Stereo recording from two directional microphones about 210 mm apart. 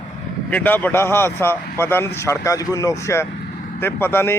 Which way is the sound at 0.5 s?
10° left (ahead or behind).